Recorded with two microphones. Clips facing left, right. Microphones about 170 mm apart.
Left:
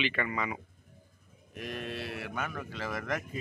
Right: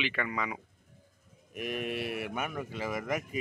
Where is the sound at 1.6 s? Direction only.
15° right (ahead or behind).